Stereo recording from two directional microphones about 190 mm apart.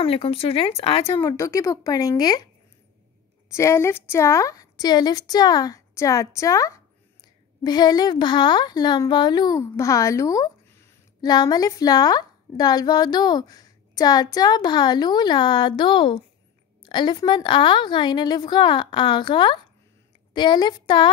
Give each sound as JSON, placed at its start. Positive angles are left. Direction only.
{"t": 0.0, "sound": "a woman's voice", "side_deg": 30}
{"t": 1.0, "sound": "a woman's voice", "side_deg": 15}
{"t": 3.5, "sound": "a woman's voice", "side_deg": 15}